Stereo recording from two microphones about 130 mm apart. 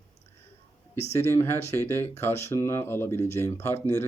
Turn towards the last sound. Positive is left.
turn(degrees=20)  # may be behind; listen again after turning